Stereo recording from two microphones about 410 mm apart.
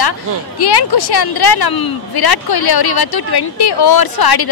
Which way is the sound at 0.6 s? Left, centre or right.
Left.